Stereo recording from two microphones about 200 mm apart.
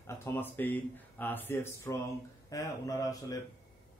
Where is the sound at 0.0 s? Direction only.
10° left (ahead or behind).